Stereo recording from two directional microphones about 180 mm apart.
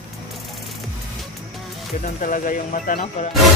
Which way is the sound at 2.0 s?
45° left (ahead or behind).